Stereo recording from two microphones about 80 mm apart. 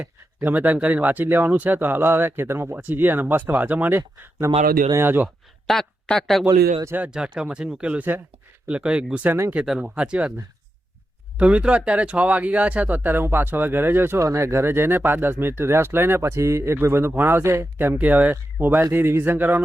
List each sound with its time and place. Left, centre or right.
0.0 s speech: right
4.4 s speech: right
5.0 s speech: right
5.6 s speech: centre
7.1 s speech: centre
9.3 s speech: right
9.6 s speech: centre
11.3 s speech: centre